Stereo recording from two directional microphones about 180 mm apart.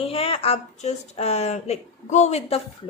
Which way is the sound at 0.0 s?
35° left (ahead or behind).